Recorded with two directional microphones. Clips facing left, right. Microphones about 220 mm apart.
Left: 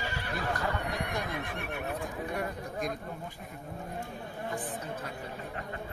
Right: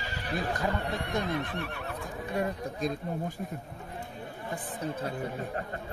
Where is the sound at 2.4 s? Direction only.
25° right (ahead or behind).